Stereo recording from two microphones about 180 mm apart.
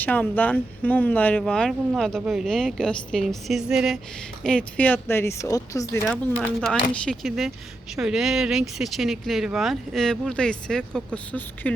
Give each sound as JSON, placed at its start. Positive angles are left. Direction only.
{"t": 0.0, "sound": "speech", "side_deg": 10}
{"t": 6.4, "sound": "speech", "side_deg": 5}